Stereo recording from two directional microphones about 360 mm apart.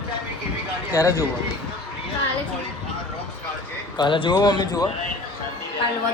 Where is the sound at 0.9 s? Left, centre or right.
Centre.